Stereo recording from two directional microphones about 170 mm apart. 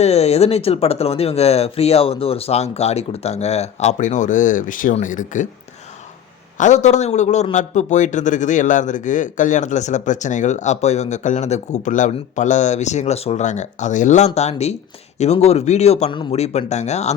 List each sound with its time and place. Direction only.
0.0 s speech: 40° left (ahead or behind)
6.6 s a man's voice: 45° left (ahead or behind)